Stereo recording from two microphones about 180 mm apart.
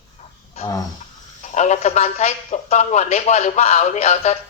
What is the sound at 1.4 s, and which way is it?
A man's voice, 40° left (ahead or behind).